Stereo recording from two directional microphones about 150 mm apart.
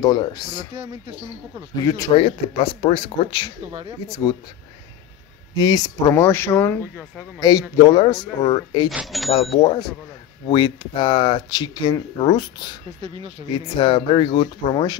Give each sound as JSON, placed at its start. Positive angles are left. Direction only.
{"t": 0.0, "sound": "speech", "side_deg": 25}
{"t": 1.9, "sound": "speech", "side_deg": 25}
{"t": 2.1, "sound": "speech", "side_deg": 40}
{"t": 5.6, "sound": "speech", "side_deg": 25}
{"t": 7.3, "sound": "speech", "side_deg": 25}
{"t": 8.9, "sound": "speech", "side_deg": 0}
{"t": 9.3, "sound": "speech", "side_deg": 40}
{"t": 9.6, "sound": "speech", "side_deg": 25}